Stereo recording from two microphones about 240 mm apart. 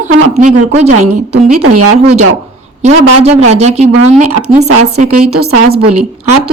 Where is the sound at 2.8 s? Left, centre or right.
Right.